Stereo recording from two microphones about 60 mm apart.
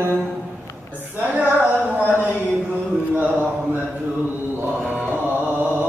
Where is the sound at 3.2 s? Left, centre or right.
Right.